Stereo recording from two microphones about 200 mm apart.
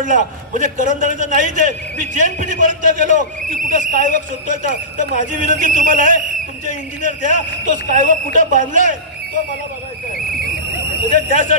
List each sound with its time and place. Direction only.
0.0 s a man's voice: 40° right (ahead or behind)
11.2 s a man's voice: 40° right (ahead or behind)